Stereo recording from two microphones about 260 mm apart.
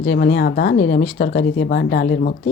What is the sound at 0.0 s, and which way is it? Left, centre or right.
Speech, left.